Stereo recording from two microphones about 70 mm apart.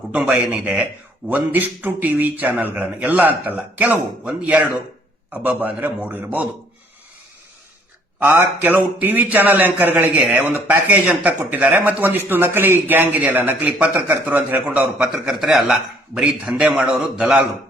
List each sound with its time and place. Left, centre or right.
0.1 s a man's voice: centre
8.2 s a man's voice: right
14.9 s a man's voice: centre